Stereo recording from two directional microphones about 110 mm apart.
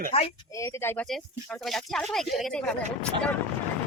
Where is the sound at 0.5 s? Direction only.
25° left (ahead or behind).